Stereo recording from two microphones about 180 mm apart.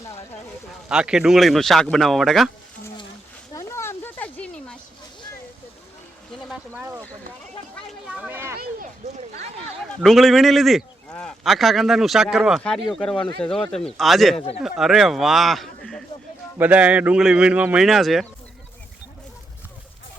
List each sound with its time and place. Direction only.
0.9 s a man's voice: 5° right (ahead or behind)
3.5 s a sound: 15° left (ahead or behind)
6.7 s a sound: 15° right (ahead or behind)
9.9 s a man's voice: centre (ahead or behind)
14.3 s speech: 35° left (ahead or behind)
14.6 s a man's voice: centre (ahead or behind)
16.6 s a man's voice: 10° right (ahead or behind)